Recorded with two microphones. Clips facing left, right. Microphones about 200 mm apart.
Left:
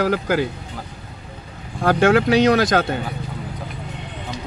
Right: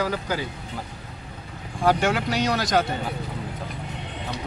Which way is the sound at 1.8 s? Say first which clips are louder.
Left 6 dB; 55° left (ahead or behind).